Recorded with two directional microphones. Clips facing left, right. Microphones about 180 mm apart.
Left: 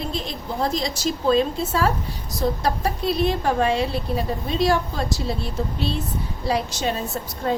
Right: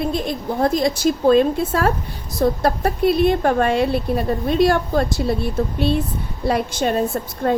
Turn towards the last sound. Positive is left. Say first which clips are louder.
# right 5 dB
turn(degrees=-55)  # may be behind; listen again after turning